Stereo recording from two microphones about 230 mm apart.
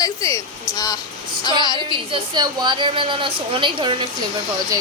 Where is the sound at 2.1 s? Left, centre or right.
Centre.